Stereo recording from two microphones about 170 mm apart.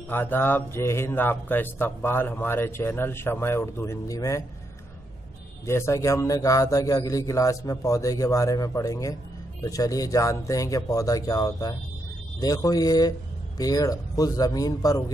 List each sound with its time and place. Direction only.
0.1 s a man's voice: 10° left (ahead or behind)
5.7 s a man's voice: 15° left (ahead or behind)